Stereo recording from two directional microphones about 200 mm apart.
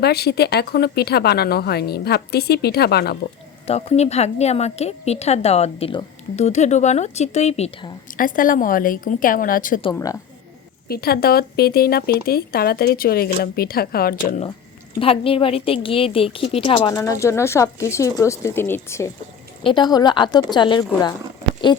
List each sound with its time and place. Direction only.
0.0 s speech: 55° left (ahead or behind)
3.7 s a woman's voice: 30° left (ahead or behind)
8.0 s speech: 45° left (ahead or behind)
9.9 s speech: 15° left (ahead or behind)
10.8 s speech: 50° left (ahead or behind)
14.9 s a woman's voice: 25° left (ahead or behind)
16.9 s a woman's voice: 15° left (ahead or behind)